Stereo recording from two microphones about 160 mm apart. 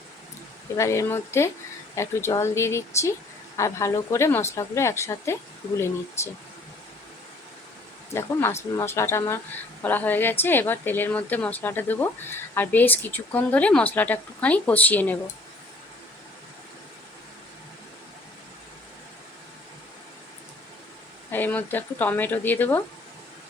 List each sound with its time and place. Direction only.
0.8 s a woman's voice: 15° left (ahead or behind)
8.1 s a woman's voice: 15° left (ahead or behind)
21.2 s a woman's voice: 10° left (ahead or behind)